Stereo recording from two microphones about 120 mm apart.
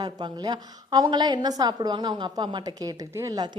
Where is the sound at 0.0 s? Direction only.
35° right (ahead or behind).